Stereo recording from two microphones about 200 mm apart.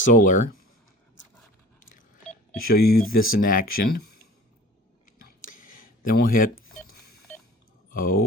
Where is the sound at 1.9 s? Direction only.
40° left (ahead or behind).